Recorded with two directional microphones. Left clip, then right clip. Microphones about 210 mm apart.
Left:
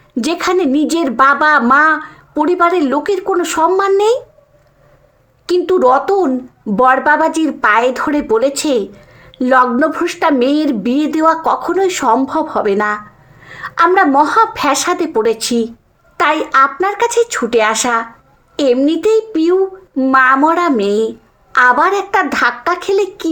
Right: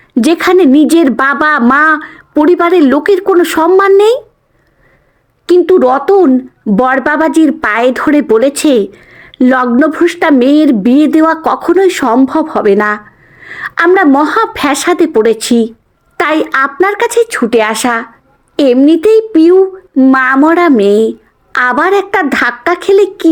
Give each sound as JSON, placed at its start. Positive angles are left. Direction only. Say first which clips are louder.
{"t": 0.1, "sound": "speech", "louder": "right 7 dB", "side_deg": -40}
{"t": 5.5, "sound": "speech", "louder": "right 4 dB", "side_deg": -35}